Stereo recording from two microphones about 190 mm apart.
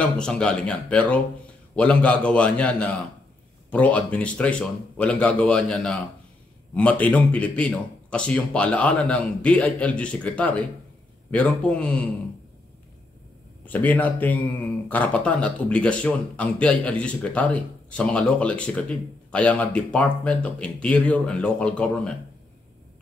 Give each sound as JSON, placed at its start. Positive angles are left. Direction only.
{"t": 0.0, "sound": "speech", "side_deg": 5}
{"t": 13.7, "sound": "speech", "side_deg": 10}